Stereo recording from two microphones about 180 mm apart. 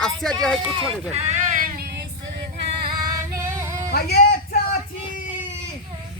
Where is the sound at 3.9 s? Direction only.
60° left (ahead or behind).